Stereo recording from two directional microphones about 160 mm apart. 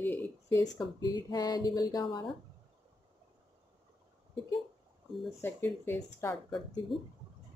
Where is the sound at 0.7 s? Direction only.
25° left (ahead or behind).